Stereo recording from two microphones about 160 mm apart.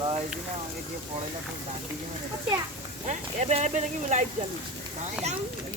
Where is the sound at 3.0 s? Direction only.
45° right (ahead or behind).